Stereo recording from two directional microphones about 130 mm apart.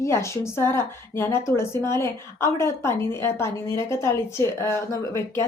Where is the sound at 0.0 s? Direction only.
20° left (ahead or behind).